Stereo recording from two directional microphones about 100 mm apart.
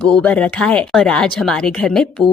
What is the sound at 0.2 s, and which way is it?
Speech, 15° left (ahead or behind).